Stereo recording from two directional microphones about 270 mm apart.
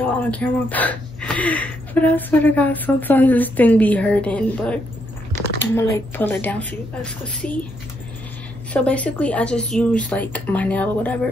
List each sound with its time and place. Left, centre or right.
0.0 s speech: centre
8.7 s speech: centre